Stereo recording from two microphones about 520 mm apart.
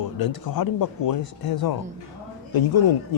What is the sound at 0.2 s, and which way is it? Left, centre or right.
A man's voice, left.